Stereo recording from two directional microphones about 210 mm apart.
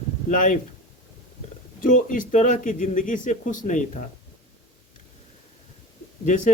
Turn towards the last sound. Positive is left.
turn(degrees=40)  # may be behind; listen again after turning